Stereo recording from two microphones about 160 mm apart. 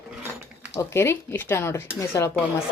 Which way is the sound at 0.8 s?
15° left (ahead or behind).